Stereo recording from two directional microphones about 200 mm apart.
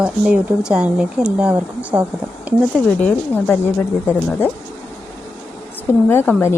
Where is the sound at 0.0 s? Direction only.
5° right (ahead or behind).